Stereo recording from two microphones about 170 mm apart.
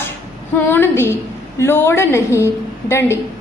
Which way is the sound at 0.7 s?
15° left (ahead or behind).